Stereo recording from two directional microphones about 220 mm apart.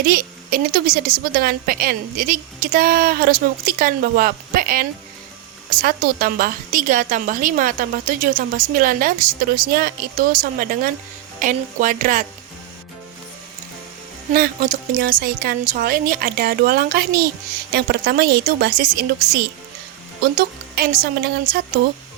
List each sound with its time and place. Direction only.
0.0 s a woman's voice: 40° right (ahead or behind)
14.3 s a woman's voice: 40° right (ahead or behind)